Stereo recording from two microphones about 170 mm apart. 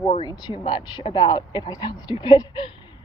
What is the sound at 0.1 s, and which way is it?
A woman's voice, 25° left (ahead or behind).